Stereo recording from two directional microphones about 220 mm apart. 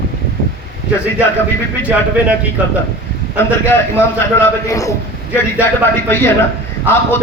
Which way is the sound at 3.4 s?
10° left (ahead or behind).